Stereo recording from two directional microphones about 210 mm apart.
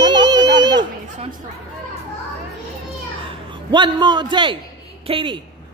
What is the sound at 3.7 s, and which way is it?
A man's voice, 20° right (ahead or behind).